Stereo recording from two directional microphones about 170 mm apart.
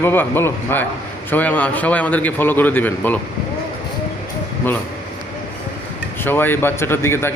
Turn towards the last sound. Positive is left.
turn(degrees=15)  # may be behind; listen again after turning